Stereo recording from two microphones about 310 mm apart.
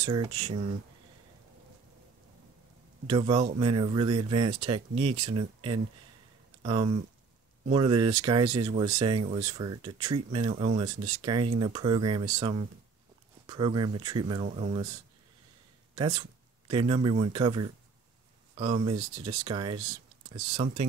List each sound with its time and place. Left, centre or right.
0.0 s speech: centre
3.1 s speech: centre
15.9 s speech: centre